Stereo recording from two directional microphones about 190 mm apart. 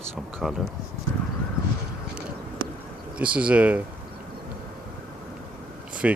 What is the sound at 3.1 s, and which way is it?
Speech, 5° right (ahead or behind).